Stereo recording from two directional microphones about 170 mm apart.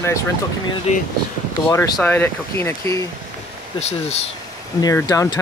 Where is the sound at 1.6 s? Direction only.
15° left (ahead or behind).